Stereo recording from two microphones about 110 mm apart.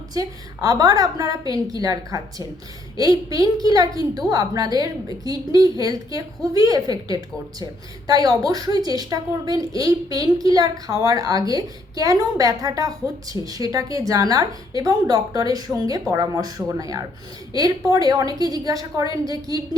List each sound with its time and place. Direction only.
0.1 s a woman's voice: 35° right (ahead or behind)